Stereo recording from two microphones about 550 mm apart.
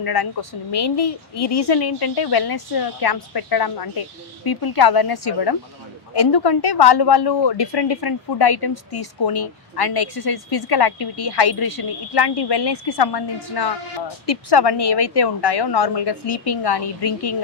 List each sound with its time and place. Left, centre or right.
0.0 s a woman's voice: left